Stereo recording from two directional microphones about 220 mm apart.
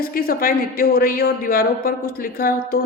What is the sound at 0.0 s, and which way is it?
Speech, 40° left (ahead or behind).